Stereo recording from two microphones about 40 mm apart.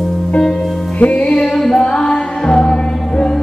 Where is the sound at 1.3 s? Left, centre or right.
Centre.